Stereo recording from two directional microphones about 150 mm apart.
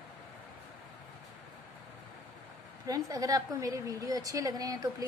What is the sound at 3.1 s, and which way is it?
A woman's voice, 25° right (ahead or behind).